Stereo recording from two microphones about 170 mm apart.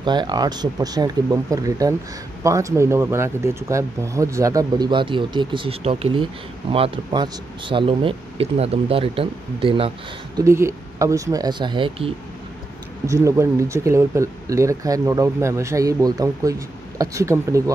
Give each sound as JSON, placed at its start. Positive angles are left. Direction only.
{"t": 0.0, "sound": "speech", "side_deg": -25}
{"t": 10.4, "sound": "speech", "side_deg": -15}
{"t": 13.0, "sound": "speech", "side_deg": -20}